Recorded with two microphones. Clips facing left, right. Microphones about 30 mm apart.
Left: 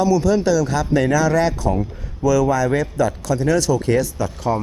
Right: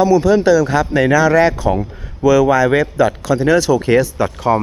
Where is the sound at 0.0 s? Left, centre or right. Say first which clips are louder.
Right 5 dB; right.